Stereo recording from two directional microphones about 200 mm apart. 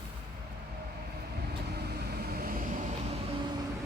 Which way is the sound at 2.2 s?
50° right (ahead or behind).